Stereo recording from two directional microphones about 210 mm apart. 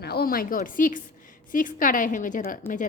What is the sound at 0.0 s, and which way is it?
A woman's voice, 50° left (ahead or behind).